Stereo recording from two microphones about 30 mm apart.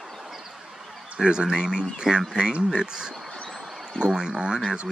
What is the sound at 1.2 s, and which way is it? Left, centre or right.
Speech, right.